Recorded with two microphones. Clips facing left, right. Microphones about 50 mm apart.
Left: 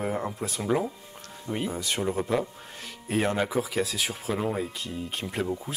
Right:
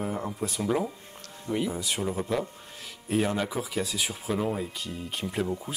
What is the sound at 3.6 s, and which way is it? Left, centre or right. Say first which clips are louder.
Speech: left 2 dB; left.